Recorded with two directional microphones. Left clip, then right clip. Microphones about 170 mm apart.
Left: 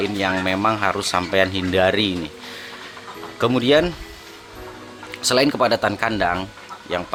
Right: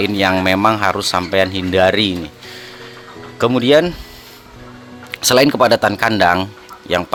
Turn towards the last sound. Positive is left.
turn(degrees=-40)  # may be behind; listen again after turning